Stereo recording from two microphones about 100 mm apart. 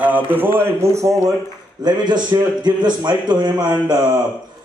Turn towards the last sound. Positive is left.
turn(degrees=-45)  # may be behind; listen again after turning